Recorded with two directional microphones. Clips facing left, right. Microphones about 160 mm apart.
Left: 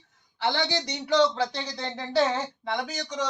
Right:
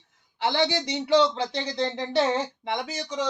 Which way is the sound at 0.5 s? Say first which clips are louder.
Right 4 dB; 25° right (ahead or behind).